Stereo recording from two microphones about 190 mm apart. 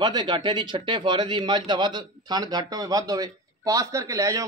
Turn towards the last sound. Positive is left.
turn(degrees=-15)  # may be behind; listen again after turning